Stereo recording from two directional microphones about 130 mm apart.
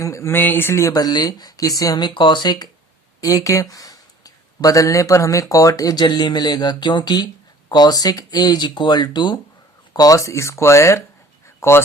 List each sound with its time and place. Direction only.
0.0 s speech: 20° left (ahead or behind)